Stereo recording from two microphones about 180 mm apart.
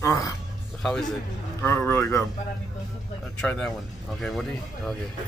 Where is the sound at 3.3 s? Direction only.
5° left (ahead or behind).